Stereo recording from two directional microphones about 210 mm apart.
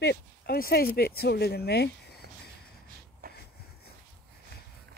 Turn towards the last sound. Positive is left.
turn(degrees=-45)  # may be behind; listen again after turning